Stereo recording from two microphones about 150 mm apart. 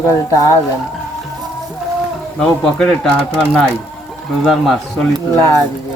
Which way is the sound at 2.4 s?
5° left (ahead or behind).